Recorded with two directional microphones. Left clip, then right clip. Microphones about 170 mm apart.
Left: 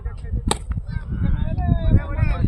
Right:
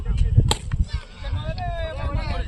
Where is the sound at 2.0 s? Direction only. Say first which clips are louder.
Even; 55° right (ahead or behind).